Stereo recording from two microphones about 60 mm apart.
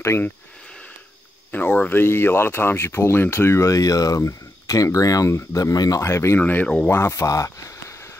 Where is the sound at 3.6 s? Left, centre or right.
Left.